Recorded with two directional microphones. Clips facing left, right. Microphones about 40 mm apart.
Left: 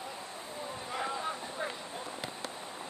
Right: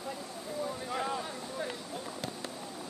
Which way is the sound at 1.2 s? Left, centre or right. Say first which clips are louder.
Left 1 dB; left.